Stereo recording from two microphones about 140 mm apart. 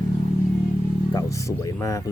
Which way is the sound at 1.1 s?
25° left (ahead or behind).